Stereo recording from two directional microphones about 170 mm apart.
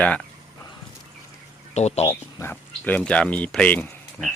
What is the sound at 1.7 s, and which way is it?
Speech, 40° left (ahead or behind).